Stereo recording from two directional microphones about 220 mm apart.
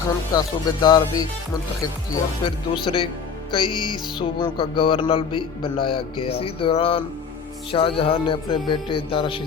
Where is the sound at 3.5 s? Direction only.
20° left (ahead or behind).